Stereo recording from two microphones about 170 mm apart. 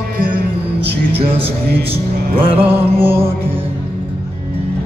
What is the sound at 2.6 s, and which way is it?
Music, 10° right (ahead or behind).